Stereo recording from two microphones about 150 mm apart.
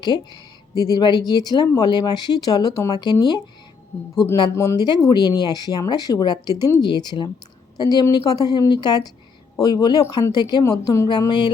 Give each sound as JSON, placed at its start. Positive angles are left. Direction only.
{"t": 0.0, "sound": "speech", "side_deg": 30}
{"t": 4.5, "sound": "speech", "side_deg": 15}
{"t": 4.8, "sound": "speech", "side_deg": 30}